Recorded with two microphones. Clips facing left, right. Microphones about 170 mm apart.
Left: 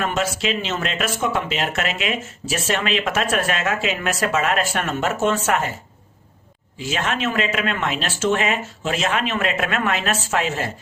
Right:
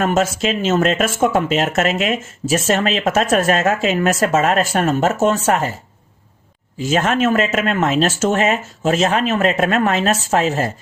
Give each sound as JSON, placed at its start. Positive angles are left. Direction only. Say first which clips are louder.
{"t": 0.0, "sound": "speech", "louder": "right 6 dB", "side_deg": -45}
{"t": 6.7, "sound": "speech", "louder": "right 7 dB", "side_deg": -45}